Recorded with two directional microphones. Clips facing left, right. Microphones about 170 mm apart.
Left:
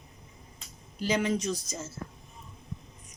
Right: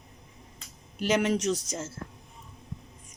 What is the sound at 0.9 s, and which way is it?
Speech, 70° right (ahead or behind).